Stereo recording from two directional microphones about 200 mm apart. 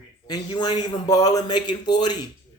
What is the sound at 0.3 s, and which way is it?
A man's voice, 20° left (ahead or behind).